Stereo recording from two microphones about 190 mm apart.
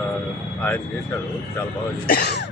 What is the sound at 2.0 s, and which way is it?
Speech, 55° left (ahead or behind).